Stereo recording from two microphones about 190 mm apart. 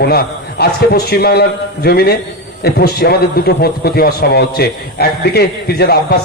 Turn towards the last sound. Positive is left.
turn(degrees=55)  # may be behind; listen again after turning